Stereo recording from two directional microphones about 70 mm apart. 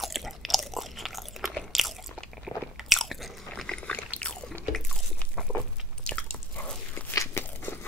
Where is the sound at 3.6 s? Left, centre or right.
Centre.